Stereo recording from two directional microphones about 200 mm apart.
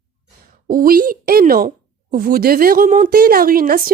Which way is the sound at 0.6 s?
45° right (ahead or behind).